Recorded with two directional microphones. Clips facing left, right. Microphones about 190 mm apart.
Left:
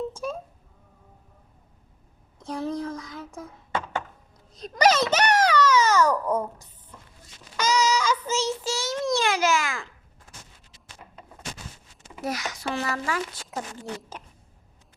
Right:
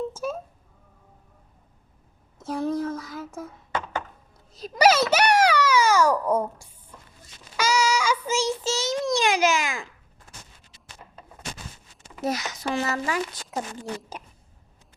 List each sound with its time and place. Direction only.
0.1 s a sound: 5° right (ahead or behind)
2.4 s a sound: 5° right (ahead or behind)
4.5 s a child's voice: 5° right (ahead or behind)
7.5 s child singing: 10° right (ahead or behind)
9.1 s babbling: 15° right (ahead or behind)
12.2 s speech: 20° right (ahead or behind)